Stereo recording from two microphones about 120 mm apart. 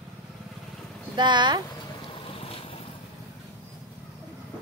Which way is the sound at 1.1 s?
40° right (ahead or behind).